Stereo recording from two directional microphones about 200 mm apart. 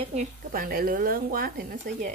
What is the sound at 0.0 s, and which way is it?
Speech, 35° right (ahead or behind).